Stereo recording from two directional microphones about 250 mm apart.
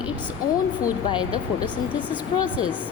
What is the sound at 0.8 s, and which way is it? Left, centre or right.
Speech, centre.